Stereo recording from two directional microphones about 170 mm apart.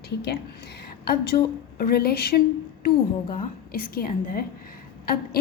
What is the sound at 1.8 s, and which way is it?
Speech, 65° left (ahead or behind).